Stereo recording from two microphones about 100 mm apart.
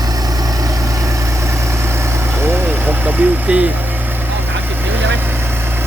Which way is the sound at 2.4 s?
25° right (ahead or behind).